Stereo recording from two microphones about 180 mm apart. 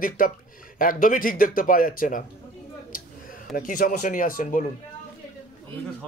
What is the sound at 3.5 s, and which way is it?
Speech, 50° left (ahead or behind).